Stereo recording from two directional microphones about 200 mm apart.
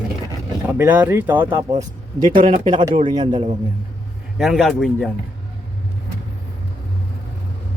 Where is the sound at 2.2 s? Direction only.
25° right (ahead or behind).